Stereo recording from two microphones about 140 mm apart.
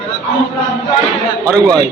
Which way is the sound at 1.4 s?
25° right (ahead or behind).